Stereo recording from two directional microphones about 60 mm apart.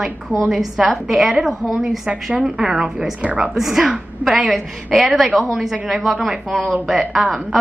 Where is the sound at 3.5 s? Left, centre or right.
Centre.